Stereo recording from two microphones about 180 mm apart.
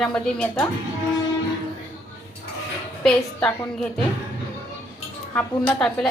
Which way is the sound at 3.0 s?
5° left (ahead or behind).